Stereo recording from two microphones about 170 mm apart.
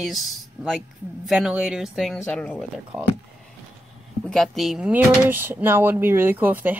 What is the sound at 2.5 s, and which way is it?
Speech, 10° right (ahead or behind).